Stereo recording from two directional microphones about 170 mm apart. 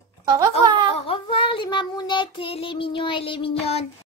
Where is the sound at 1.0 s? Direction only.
30° left (ahead or behind).